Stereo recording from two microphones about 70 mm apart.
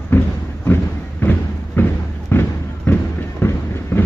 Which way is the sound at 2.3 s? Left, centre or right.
Left.